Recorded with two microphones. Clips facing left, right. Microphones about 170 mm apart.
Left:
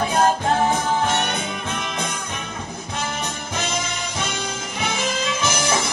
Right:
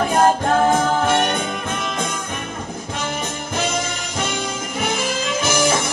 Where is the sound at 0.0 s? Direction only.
50° right (ahead or behind).